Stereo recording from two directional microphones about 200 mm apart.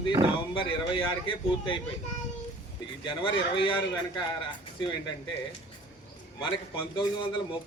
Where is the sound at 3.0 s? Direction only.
25° left (ahead or behind).